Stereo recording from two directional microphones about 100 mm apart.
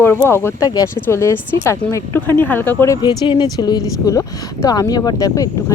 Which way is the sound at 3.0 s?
50° left (ahead or behind).